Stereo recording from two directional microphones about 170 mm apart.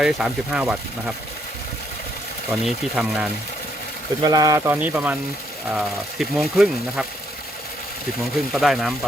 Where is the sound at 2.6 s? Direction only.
5° right (ahead or behind).